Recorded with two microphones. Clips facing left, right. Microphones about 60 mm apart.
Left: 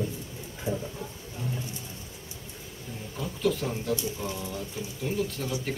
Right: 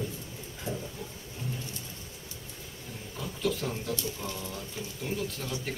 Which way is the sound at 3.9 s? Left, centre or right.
Centre.